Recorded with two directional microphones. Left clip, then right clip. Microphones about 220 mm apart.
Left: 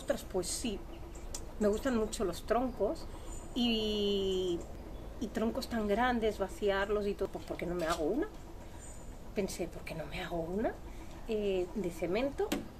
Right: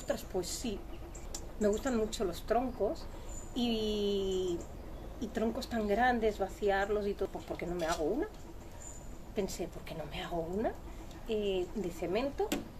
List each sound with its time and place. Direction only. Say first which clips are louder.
0.0 s speech: left 1 dB; 15° left (ahead or behind)
7.7 s speech: even; 5° left (ahead or behind)
9.3 s speech: even; 15° left (ahead or behind)